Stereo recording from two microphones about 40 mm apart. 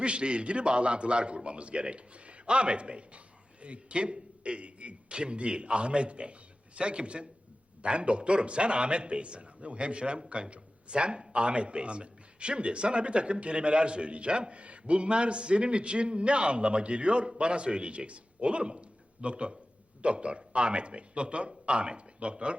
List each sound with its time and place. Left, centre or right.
0.0 s a man's voice: right